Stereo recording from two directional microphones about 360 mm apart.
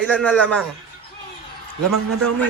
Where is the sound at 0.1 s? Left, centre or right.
Centre.